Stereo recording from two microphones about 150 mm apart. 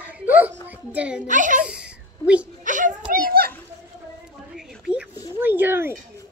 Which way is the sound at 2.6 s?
55° right (ahead or behind).